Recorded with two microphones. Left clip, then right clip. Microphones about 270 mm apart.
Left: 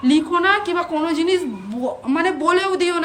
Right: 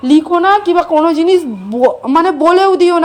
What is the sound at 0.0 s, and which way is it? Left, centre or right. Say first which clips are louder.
A woman's voice: right 7 dB; centre.